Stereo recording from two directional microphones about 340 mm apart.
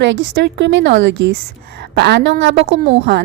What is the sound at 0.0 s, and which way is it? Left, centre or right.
A woman's voice, right.